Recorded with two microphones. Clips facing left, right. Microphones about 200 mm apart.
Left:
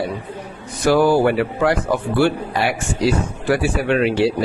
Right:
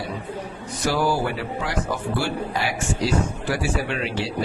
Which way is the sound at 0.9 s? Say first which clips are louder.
Left 8 dB; 55° left (ahead or behind).